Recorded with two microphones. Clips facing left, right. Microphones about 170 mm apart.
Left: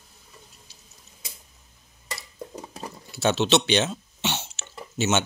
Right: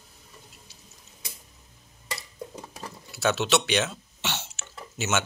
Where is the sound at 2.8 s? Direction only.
25° left (ahead or behind).